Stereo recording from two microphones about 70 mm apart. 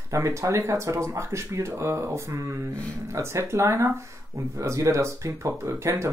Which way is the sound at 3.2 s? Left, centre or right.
Right.